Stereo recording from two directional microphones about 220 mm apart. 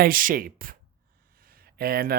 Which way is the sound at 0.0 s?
40° right (ahead or behind).